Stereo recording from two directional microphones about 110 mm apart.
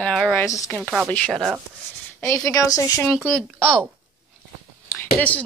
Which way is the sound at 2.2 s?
30° left (ahead or behind).